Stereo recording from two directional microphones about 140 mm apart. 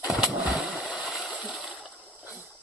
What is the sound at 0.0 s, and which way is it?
Splash, 5° right (ahead or behind).